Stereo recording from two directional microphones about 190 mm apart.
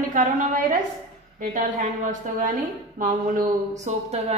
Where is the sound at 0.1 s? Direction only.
45° right (ahead or behind).